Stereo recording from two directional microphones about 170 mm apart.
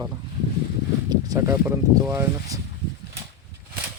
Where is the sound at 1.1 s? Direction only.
20° right (ahead or behind).